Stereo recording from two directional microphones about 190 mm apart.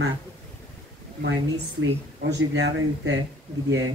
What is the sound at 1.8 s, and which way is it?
Speech, 85° right.